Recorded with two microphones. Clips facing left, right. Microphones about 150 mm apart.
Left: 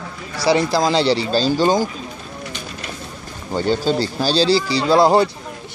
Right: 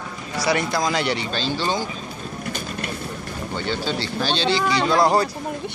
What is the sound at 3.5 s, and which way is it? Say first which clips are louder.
Speech: left 8 dB; 40° left (ahead or behind).